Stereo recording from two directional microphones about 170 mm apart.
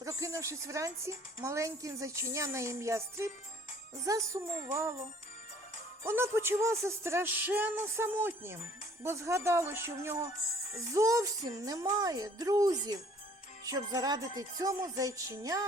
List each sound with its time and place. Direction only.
0.0 s a woman's voice: 20° right (ahead or behind)
6.1 s a woman's voice: 15° right (ahead or behind)